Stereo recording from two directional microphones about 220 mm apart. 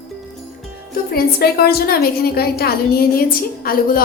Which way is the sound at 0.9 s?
45° left (ahead or behind).